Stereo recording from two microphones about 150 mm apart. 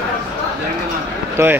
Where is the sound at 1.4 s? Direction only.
20° right (ahead or behind).